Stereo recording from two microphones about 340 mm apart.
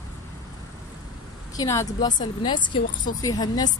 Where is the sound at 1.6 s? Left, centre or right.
Centre.